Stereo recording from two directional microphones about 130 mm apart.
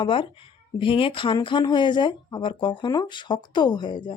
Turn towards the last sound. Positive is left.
turn(degrees=35)  # may be behind; listen again after turning